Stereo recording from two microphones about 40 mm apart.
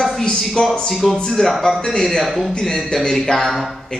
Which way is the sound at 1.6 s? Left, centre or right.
Centre.